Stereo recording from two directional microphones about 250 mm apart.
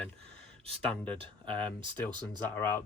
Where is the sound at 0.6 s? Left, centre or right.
Right.